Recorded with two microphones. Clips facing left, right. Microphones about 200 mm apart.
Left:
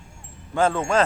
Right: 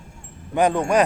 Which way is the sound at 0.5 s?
15° right (ahead or behind).